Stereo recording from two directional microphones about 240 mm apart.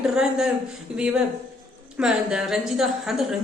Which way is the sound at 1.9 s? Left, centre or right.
Centre.